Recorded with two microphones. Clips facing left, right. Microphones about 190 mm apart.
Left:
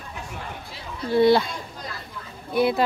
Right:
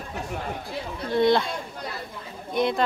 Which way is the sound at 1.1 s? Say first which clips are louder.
Left 3 dB; 5° left (ahead or behind).